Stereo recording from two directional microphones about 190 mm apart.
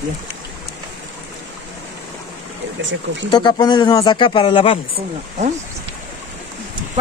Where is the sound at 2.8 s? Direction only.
75° right (ahead or behind).